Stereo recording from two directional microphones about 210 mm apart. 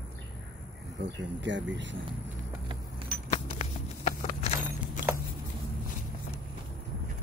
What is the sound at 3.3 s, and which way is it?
Clip-clop, 35° left (ahead or behind).